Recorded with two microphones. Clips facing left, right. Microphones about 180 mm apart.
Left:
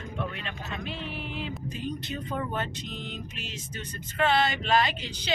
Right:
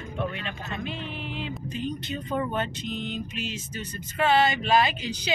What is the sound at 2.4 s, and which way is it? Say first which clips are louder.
Speech: right 5 dB; centre (ahead or behind).